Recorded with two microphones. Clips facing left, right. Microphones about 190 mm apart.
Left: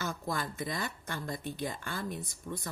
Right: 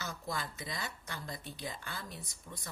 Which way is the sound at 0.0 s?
50° left (ahead or behind).